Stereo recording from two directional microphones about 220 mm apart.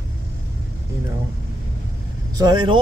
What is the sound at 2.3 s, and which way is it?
Speech, 20° right (ahead or behind).